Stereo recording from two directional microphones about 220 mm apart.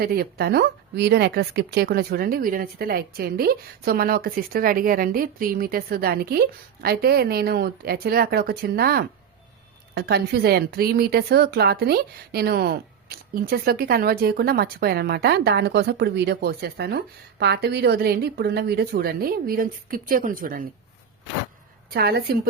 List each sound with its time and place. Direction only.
0.0 s speech: 45° right (ahead or behind)
21.9 s speech: 45° right (ahead or behind)